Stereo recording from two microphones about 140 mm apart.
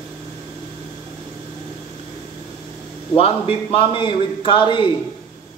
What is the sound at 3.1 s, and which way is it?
A man's voice, 45° left (ahead or behind).